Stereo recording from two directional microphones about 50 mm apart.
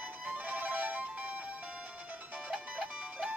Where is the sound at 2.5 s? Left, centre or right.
Centre.